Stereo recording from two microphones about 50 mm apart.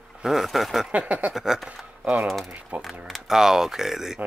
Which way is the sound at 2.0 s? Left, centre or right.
Right.